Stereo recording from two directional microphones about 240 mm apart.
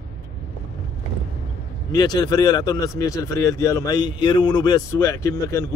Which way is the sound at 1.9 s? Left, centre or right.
Centre.